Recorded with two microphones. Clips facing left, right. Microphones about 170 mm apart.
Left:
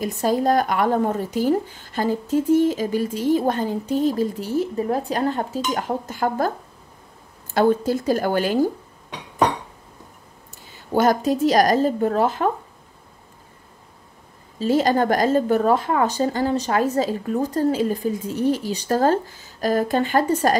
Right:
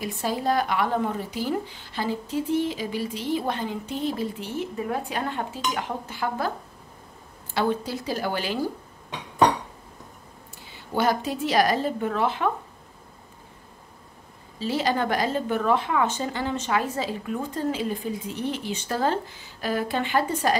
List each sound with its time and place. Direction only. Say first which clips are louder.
0.0 s speech: left 6 dB; 45° left (ahead or behind)
7.5 s speech: left 7 dB; 45° left (ahead or behind)
10.7 s speech: left 5 dB; 45° left (ahead or behind)
14.6 s speech: left 6 dB; 45° left (ahead or behind)